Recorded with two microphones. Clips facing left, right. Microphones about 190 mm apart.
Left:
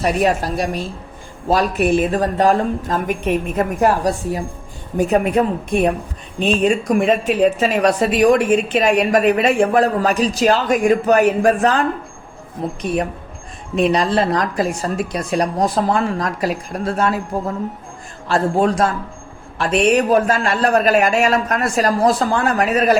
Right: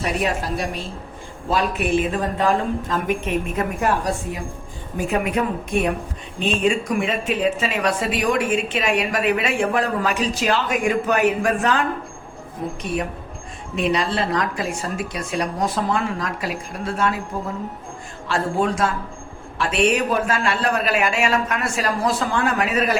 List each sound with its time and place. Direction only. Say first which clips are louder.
0.0 s speech: left 6 dB; 40° left (ahead or behind)
6.7 s speech: left 5 dB; 35° left (ahead or behind)
18.3 s speech: left 5 dB; 35° left (ahead or behind)